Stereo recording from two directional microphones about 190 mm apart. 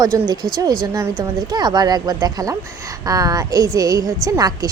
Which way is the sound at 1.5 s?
20° right (ahead or behind).